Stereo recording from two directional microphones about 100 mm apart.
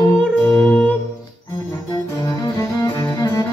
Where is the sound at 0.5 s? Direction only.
15° left (ahead or behind).